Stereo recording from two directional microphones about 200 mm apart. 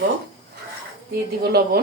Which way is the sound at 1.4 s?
50° right (ahead or behind).